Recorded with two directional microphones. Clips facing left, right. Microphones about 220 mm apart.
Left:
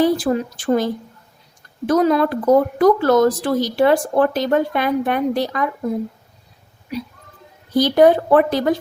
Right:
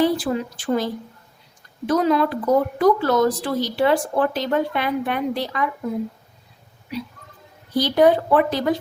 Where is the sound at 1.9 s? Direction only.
45° left (ahead or behind).